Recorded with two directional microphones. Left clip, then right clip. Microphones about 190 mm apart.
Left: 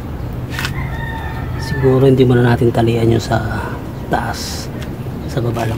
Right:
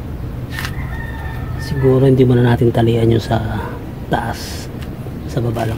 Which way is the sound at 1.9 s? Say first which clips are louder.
Left 1 dB; 10° right (ahead or behind).